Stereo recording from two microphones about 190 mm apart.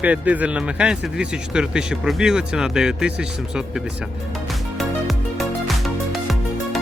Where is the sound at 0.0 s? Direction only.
10° right (ahead or behind).